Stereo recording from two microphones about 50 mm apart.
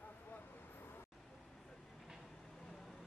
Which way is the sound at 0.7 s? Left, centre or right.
Left.